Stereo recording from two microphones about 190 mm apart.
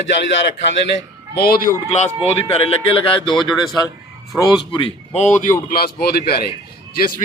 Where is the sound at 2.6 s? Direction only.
30° left (ahead or behind).